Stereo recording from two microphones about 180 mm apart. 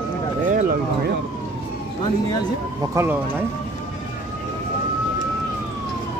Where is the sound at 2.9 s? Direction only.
10° right (ahead or behind).